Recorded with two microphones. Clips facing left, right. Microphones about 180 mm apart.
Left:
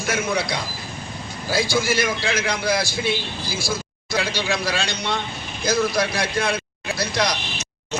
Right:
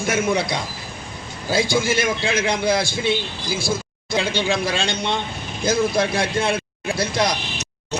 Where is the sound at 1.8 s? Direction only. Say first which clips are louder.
Right 1 dB; 20° right (ahead or behind).